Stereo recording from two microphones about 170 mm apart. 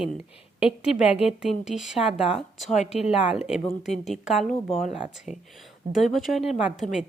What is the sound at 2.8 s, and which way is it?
Speech, 40° left (ahead or behind).